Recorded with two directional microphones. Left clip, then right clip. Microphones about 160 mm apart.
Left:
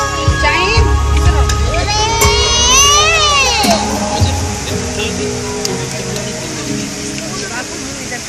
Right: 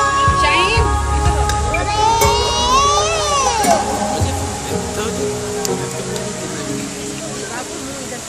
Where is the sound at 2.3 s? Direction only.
20° right (ahead or behind).